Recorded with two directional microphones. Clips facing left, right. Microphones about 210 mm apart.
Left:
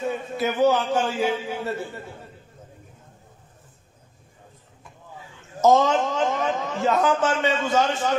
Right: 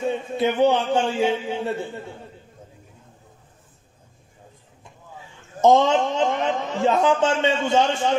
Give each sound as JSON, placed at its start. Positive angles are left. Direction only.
{"t": 0.0, "sound": "a man's voice", "side_deg": -25}
{"t": 5.7, "sound": "a man's voice", "side_deg": -25}